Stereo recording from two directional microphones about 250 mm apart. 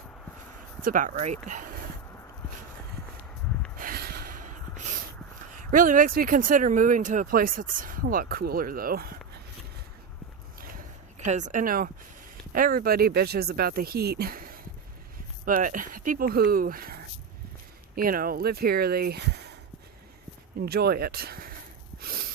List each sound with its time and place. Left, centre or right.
0.8 s speech: right
3.8 s gasp: right
5.7 s speech: right
11.2 s speech: right
20.6 s speech: right